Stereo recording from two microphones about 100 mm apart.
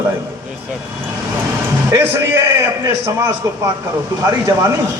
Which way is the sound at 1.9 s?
30° right (ahead or behind).